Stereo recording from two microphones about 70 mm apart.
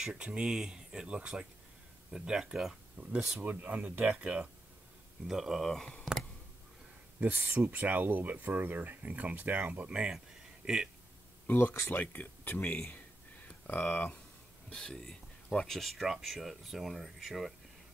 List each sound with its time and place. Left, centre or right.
0.0 s speech: centre
3.3 s speech: right
5.3 s speech: centre
5.7 s speech: centre
7.4 s speech: right; by 10.9 s centre
11.4 s speech: left
14.7 s speech: centre